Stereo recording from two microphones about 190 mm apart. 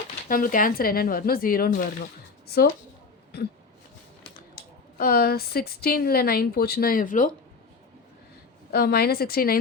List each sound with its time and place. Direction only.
0.3 s speech: 45° left (ahead or behind)
4.9 s speech: 55° left (ahead or behind)
8.7 s speech: 55° left (ahead or behind)